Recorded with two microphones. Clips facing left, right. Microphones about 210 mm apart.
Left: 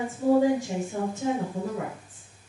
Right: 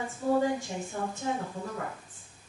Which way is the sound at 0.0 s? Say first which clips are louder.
Left 6 dB; 10° left (ahead or behind).